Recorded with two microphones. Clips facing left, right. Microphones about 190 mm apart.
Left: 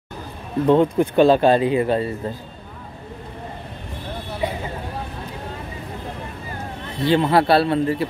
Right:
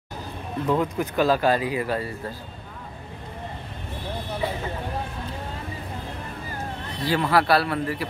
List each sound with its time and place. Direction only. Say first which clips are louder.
0.7 s a man's voice: left 8 dB; 30° left (ahead or behind)
4.4 s a sound: left 3 dB; 20° left (ahead or behind)
7.0 s a man's voice: left 5 dB; 25° left (ahead or behind)